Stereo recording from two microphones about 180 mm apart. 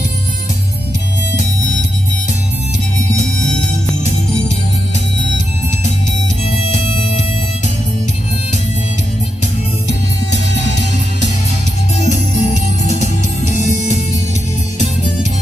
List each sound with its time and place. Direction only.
12.1 s music: 40° left (ahead or behind)